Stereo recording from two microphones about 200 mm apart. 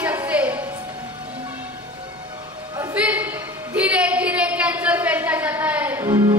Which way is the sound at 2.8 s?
10° right (ahead or behind).